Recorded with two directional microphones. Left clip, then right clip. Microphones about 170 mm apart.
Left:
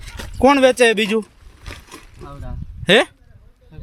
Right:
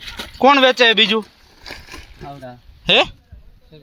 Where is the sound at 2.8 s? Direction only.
40° left (ahead or behind).